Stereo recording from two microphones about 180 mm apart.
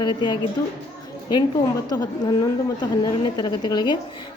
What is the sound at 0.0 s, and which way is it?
Speech, 25° left (ahead or behind).